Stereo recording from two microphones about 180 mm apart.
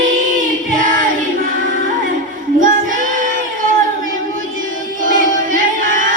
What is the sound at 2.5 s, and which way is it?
Child singing, 50° right (ahead or behind).